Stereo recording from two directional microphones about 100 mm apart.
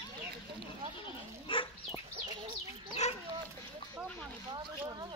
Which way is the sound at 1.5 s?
60° left (ahead or behind).